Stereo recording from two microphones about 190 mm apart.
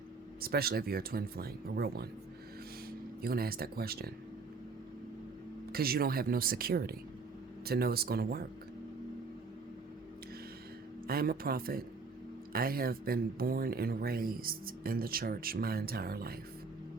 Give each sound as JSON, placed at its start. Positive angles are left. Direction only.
{"t": 0.4, "sound": "speech", "side_deg": -55}
{"t": 3.2, "sound": "speech", "side_deg": -55}
{"t": 5.7, "sound": "speech", "side_deg": -50}
{"t": 11.0, "sound": "speech", "side_deg": -50}